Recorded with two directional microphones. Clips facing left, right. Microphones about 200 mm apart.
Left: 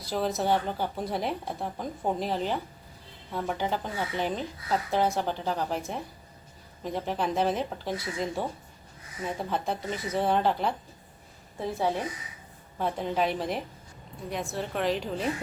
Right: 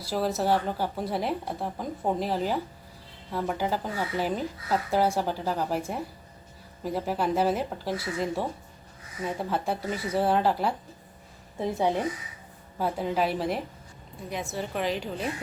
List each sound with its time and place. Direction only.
0.0 s speech: 5° right (ahead or behind)
6.8 s speech: 5° right (ahead or behind)
11.6 s a woman's voice: 20° right (ahead or behind)
12.8 s speech: 5° right (ahead or behind)